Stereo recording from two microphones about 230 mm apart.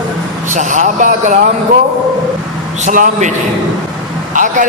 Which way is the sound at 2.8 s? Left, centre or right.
Right.